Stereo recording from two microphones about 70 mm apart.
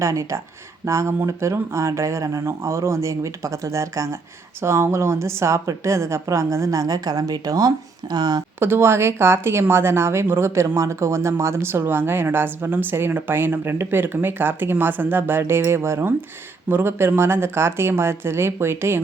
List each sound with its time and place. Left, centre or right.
0.0 s a woman's voice: right
8.1 s speech: right
8.5 s speech: right